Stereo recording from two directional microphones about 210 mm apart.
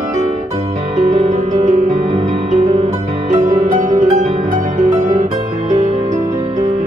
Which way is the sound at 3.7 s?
40° right (ahead or behind).